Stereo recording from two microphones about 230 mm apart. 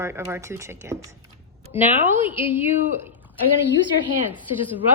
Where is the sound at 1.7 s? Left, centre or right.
Left.